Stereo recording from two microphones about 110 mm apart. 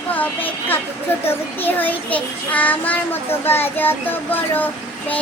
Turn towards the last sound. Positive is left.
turn(degrees=15)  # may be behind; listen again after turning